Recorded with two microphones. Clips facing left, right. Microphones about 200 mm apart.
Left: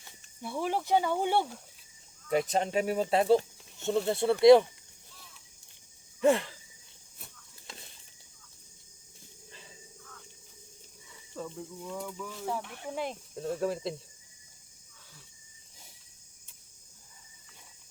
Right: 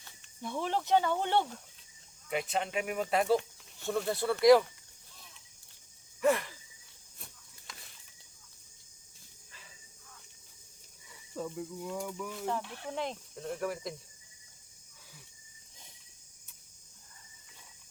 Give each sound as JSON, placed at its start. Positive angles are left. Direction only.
{"t": 0.0, "sound": "speech", "side_deg": 10}
{"t": 2.3, "sound": "speech", "side_deg": 40}
{"t": 6.1, "sound": "sigh", "side_deg": 25}
{"t": 7.7, "sound": "a sound", "side_deg": 30}
{"t": 11.3, "sound": "cricket", "side_deg": -5}
{"t": 12.8, "sound": "speech", "side_deg": 5}
{"t": 13.3, "sound": "speech", "side_deg": 25}